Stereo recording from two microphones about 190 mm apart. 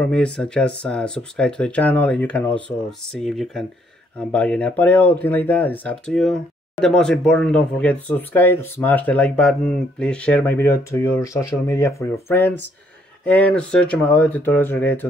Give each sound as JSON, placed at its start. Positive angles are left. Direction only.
{"t": 0.0, "sound": "speech", "side_deg": 5}